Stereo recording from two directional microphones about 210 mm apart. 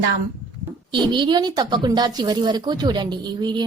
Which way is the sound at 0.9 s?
20° right (ahead or behind).